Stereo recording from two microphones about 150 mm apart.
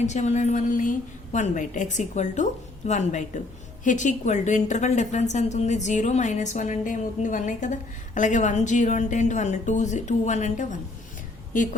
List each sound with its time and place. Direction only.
0.0 s a woman's voice: 50° left (ahead or behind)